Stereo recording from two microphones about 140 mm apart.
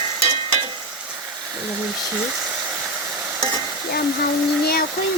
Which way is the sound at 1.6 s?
10° right (ahead or behind).